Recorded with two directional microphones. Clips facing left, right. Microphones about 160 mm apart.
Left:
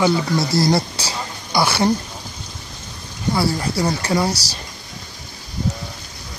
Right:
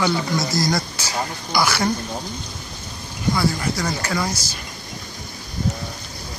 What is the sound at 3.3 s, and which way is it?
Speech, 30° left (ahead or behind).